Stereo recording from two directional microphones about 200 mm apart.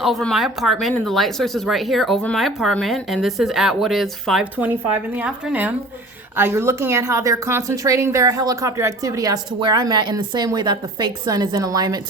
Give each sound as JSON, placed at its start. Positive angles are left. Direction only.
{"t": 0.0, "sound": "a woman's voice", "side_deg": 0}